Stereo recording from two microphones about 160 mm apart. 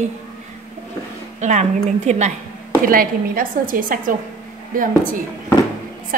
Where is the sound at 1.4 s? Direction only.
45° right (ahead or behind).